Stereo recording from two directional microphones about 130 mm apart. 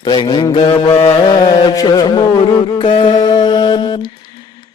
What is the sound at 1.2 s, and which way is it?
Mantra, 35° left (ahead or behind).